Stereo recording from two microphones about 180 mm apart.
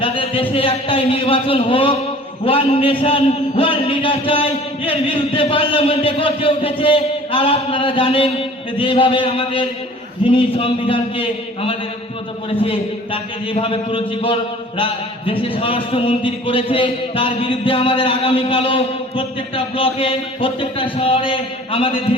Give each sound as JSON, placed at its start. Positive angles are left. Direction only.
{"t": 0.0, "sound": "a man's voice", "side_deg": 30}
{"t": 13.5, "sound": "a man's voice", "side_deg": 30}